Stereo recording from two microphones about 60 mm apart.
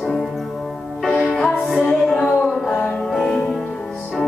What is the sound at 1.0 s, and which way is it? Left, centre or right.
Music, centre.